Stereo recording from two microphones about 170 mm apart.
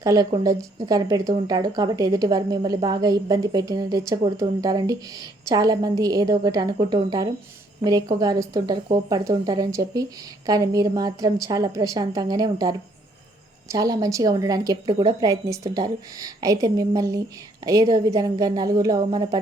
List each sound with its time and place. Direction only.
0.0 s speech: 20° right (ahead or behind)